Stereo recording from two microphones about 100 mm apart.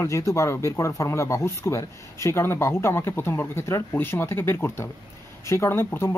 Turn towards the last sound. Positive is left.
turn(degrees=25)  # may be behind; listen again after turning